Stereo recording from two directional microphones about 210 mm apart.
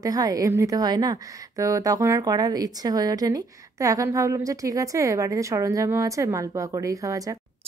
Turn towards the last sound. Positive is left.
turn(degrees=-15)  # may be behind; listen again after turning